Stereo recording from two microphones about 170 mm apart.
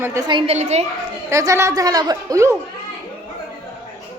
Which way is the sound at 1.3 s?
20° right (ahead or behind).